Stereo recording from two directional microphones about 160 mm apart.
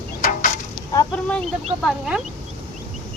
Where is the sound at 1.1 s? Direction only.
5° left (ahead or behind).